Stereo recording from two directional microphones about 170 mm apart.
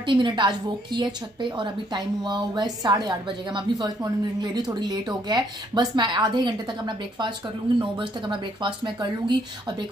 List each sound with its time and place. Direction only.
0.0 s a woman's voice: 30° right (ahead or behind)